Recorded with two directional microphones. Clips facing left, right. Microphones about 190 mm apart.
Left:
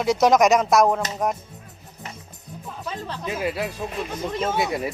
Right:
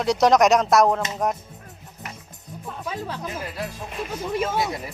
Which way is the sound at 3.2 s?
85° left.